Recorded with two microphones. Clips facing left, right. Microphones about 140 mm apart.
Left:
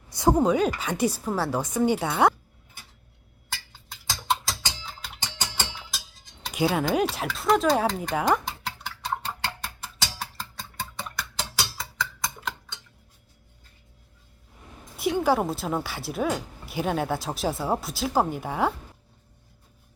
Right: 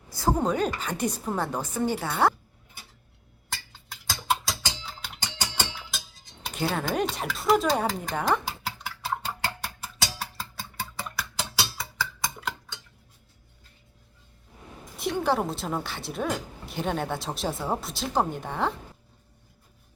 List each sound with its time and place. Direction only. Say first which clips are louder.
0.2 s speech: left 5 dB; 20° left (ahead or behind)
0.4 s a woman's voice: left 3 dB; 10° left (ahead or behind)
3.5 s a sound: even; centre (ahead or behind)
4.9 s music: even; centre (ahead or behind)
6.5 s a sound: left 4 dB; 5° left (ahead or behind)
14.9 s a woman's voice: left 3 dB; 5° left (ahead or behind)